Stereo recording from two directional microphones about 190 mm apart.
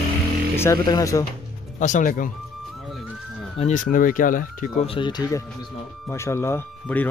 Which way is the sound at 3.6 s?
45° left (ahead or behind).